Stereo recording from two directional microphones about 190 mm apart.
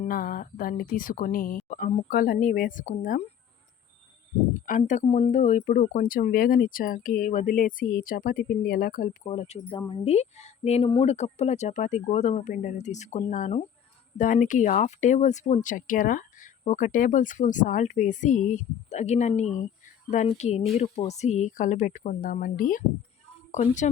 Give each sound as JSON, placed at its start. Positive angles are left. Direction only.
{"t": 0.0, "sound": "speech", "side_deg": 50}
{"t": 4.6, "sound": "speech", "side_deg": 45}